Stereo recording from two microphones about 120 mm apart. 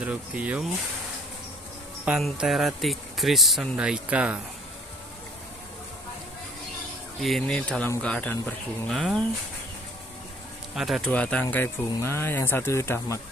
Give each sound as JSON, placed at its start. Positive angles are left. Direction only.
{"t": 0.0, "sound": "speech", "side_deg": -10}
{"t": 2.0, "sound": "speech", "side_deg": -5}
{"t": 7.2, "sound": "speech", "side_deg": 0}
{"t": 8.9, "sound": "speech", "side_deg": 0}
{"t": 10.7, "sound": "speech", "side_deg": 0}
{"t": 11.1, "sound": "speech", "side_deg": 10}